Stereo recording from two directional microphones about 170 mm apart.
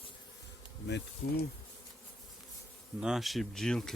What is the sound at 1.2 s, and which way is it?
Bee, 55° left (ahead or behind).